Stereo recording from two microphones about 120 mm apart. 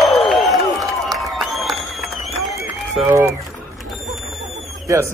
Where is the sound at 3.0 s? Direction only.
20° right (ahead or behind).